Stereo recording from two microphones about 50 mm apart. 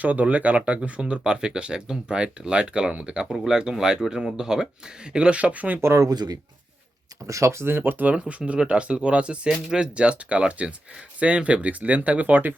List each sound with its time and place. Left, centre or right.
0.0 s speech: right
7.3 s speech: right
8.1 s speech: right